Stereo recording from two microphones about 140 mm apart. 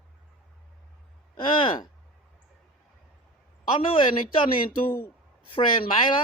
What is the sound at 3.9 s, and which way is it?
Speech, 35° left (ahead or behind).